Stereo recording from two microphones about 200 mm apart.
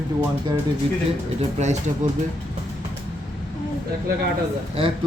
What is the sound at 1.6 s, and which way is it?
Speech, 35° right (ahead or behind).